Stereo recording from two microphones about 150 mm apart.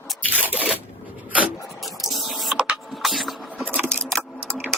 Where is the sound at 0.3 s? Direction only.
10° right (ahead or behind).